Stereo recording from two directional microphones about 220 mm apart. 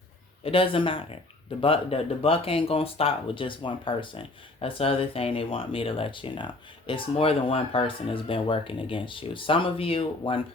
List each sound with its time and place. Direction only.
0.4 s speech: 25° left (ahead or behind)